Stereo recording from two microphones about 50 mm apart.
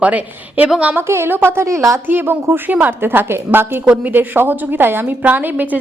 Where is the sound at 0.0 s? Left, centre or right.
Right.